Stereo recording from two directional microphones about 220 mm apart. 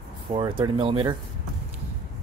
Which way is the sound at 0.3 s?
20° right (ahead or behind).